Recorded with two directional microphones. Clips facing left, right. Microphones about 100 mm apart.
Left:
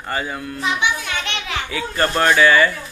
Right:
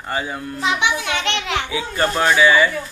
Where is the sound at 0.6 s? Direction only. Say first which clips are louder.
Right 2 dB; 90° right.